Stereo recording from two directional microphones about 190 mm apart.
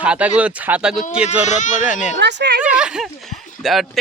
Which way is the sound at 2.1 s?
65° right (ahead or behind).